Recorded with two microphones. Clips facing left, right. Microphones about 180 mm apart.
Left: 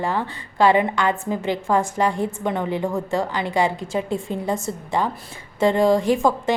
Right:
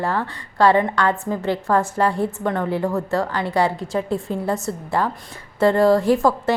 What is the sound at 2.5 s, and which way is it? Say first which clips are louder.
A woman's voice: right 1 dB; centre (ahead or behind).